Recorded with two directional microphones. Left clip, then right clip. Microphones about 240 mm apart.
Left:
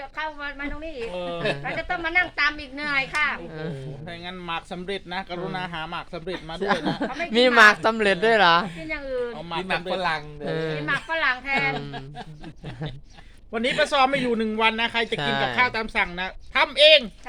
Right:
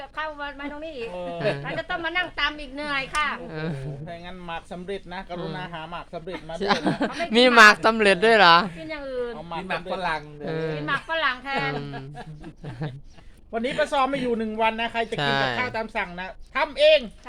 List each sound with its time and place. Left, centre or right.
0.2 s speech: centre
1.1 s speech: left
1.9 s speech: centre
3.5 s speech: centre
4.1 s speech: left
6.6 s speech: centre
8.9 s speech: centre
9.5 s speech: left
10.4 s speech: centre
13.5 s speech: left
15.1 s speech: centre
15.5 s speech: left